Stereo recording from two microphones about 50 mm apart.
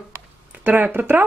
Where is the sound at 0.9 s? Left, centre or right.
Right.